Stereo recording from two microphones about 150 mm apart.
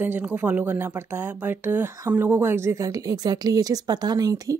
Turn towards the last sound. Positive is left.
turn(degrees=-25)  # may be behind; listen again after turning